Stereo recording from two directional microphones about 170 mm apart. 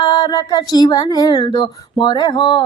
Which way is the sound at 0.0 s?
25° left (ahead or behind).